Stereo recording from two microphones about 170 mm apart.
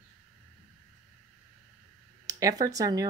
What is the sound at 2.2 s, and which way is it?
Speech, 20° right (ahead or behind).